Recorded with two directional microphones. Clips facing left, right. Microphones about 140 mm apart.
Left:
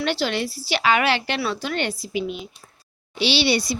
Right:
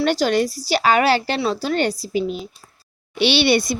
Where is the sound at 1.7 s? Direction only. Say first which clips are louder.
Right 5 dB; 40° right (ahead or behind).